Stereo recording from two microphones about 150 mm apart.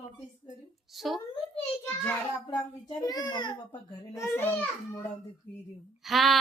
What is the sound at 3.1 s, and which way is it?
Speech, 30° left (ahead or behind).